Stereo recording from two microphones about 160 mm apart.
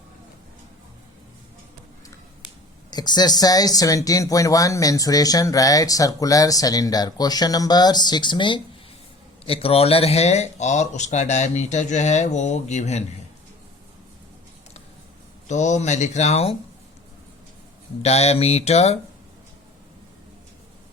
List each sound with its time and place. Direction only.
2.9 s speech: 25° left (ahead or behind); by 13.1 s 45° left (ahead or behind)
15.4 s speech: 50° left (ahead or behind)
18.0 s speech: 40° left (ahead or behind)